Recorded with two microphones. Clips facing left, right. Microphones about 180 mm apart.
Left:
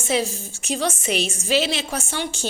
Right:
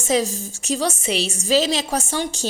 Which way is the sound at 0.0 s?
40° right (ahead or behind).